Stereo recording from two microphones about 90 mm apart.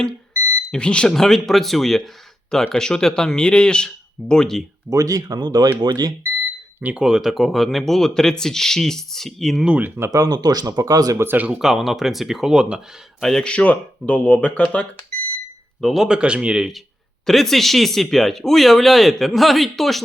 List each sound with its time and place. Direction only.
0.7 s speech: 10° left (ahead or behind)
4.9 s speech: 40° right (ahead or behind)
6.4 s smoke detector: 15° right (ahead or behind)
7.0 s speech: 5° right (ahead or behind)
9.6 s speech: 20° right (ahead or behind)
10.1 s speech: 45° right (ahead or behind)
11.2 s speech: 20° right (ahead or behind)
11.6 s speech: centre (ahead or behind)
13.2 s speech: 5° left (ahead or behind)
15.8 s a man's voice: 5° right (ahead or behind)